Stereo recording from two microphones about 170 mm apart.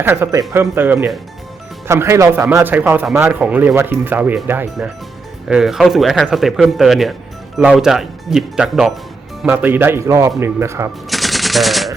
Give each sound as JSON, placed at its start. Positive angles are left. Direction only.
{"t": 0.0, "sound": "speech", "side_deg": -15}
{"t": 11.1, "sound": "machine gun", "side_deg": 0}